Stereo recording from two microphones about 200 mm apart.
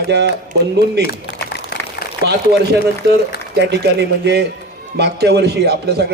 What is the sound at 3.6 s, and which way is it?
A man's voice, 55° right (ahead or behind).